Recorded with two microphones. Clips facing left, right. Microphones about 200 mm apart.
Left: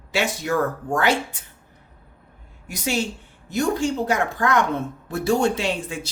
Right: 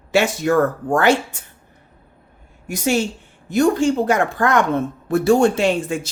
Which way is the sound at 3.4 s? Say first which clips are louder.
Right 6 dB; 50° right (ahead or behind).